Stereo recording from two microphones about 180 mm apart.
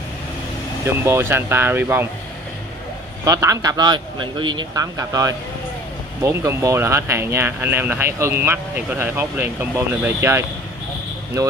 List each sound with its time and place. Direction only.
1.0 s speech: 15° right (ahead or behind)
3.3 s a man's voice: 20° right (ahead or behind)